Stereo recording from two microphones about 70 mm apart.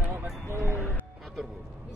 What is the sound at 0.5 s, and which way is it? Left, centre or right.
Speech, right.